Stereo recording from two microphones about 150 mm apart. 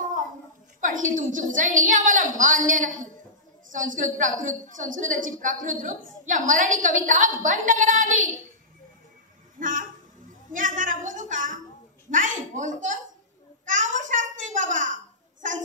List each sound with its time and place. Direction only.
0.7 s a woman's voice: 60° right (ahead or behind)
9.6 s a man's voice: 65° right (ahead or behind)
10.5 s a sound: 65° right (ahead or behind)
12.1 s a woman's voice: 60° right (ahead or behind)
13.7 s babbling: 60° right (ahead or behind)